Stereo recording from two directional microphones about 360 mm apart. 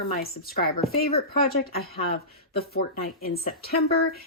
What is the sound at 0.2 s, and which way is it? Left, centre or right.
Speech, left.